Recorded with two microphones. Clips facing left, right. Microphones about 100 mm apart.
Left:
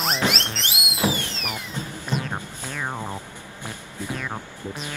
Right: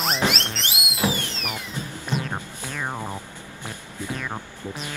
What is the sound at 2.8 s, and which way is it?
Music, 15° right (ahead or behind).